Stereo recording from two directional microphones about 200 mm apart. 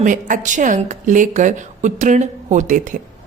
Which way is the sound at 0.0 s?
40° right (ahead or behind).